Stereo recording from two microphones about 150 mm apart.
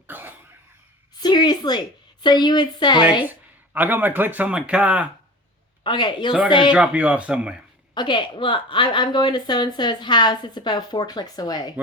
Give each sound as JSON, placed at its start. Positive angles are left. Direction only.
{"t": 0.1, "sound": "cough", "side_deg": -10}
{"t": 1.2, "sound": "a woman's voice", "side_deg": 30}
{"t": 3.2, "sound": "speech", "side_deg": -10}
{"t": 5.8, "sound": "speech", "side_deg": 30}
{"t": 6.7, "sound": "speech", "side_deg": -5}
{"t": 7.9, "sound": "a woman's voice", "side_deg": 30}